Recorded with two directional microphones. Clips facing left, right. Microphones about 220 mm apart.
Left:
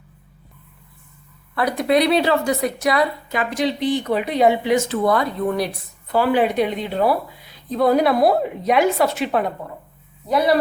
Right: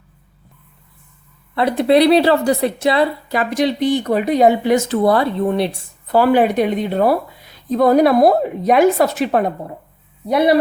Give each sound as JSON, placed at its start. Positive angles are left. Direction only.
{"t": 1.5, "sound": "a woman's voice", "side_deg": -30}
{"t": 6.1, "sound": "a woman's voice", "side_deg": -40}